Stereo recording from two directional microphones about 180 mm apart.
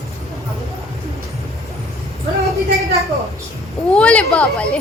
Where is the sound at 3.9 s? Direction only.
5° left (ahead or behind).